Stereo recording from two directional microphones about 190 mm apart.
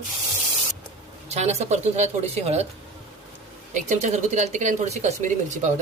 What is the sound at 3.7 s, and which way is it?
Speech, 40° right (ahead or behind).